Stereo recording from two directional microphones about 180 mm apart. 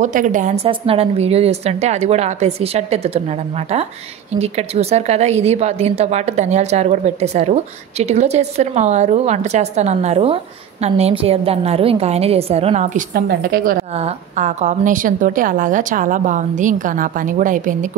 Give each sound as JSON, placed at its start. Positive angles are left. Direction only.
{"t": 0.0, "sound": "a woman's voice", "side_deg": -45}
{"t": 0.7, "sound": "a woman's voice", "side_deg": -30}
{"t": 13.1, "sound": "a woman's voice", "side_deg": -55}
{"t": 13.9, "sound": "a woman's voice", "side_deg": -40}